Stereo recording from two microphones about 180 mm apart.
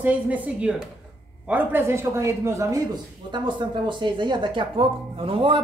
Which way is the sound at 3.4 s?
25° right (ahead or behind).